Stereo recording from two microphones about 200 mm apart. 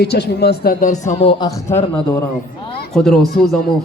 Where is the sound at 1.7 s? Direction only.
15° left (ahead or behind).